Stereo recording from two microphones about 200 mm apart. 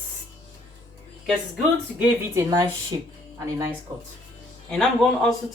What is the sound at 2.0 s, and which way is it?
Speech, 15° right (ahead or behind).